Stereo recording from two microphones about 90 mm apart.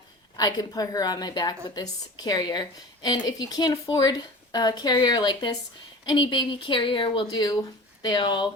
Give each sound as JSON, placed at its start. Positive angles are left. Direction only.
{"t": 0.3, "sound": "a woman's voice", "side_deg": 45}